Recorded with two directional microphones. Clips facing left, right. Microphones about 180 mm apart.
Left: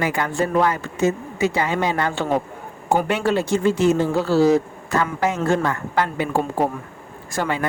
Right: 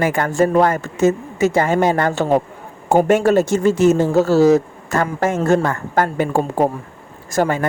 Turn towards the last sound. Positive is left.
turn(degrees=-45)  # may be behind; listen again after turning